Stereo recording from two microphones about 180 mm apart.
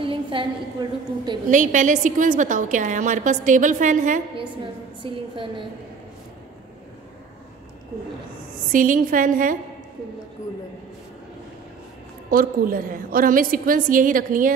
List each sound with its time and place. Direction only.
0.0 s a woman's voice: 30° right (ahead or behind)
1.5 s a woman's voice: 45° right (ahead or behind)
5.0 s a woman's voice: 25° right (ahead or behind)
8.7 s a woman's voice: 50° right (ahead or behind)
12.3 s a woman's voice: 50° right (ahead or behind)